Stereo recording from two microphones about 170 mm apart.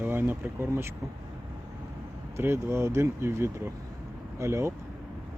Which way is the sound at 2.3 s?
15° right (ahead or behind).